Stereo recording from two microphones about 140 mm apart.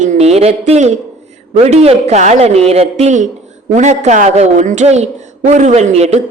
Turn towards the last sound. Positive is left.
turn(degrees=-50)  # may be behind; listen again after turning